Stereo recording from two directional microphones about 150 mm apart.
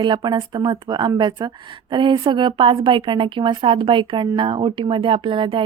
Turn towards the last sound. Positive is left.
turn(degrees=-35)  # may be behind; listen again after turning